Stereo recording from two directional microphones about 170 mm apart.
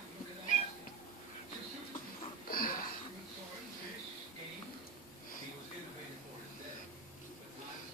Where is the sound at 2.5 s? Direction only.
60° left (ahead or behind).